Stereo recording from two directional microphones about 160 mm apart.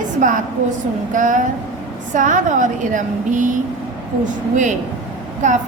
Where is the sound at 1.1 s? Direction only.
55° right (ahead or behind).